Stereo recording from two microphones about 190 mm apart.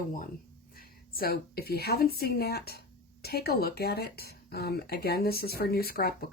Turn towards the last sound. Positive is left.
turn(degrees=55)  # may be behind; listen again after turning